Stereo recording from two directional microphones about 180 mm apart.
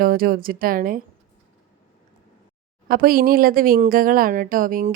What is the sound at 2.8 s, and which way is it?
Speech, 55° right (ahead or behind).